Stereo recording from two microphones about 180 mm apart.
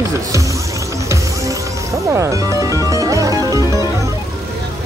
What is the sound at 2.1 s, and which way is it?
Music, 15° right (ahead or behind).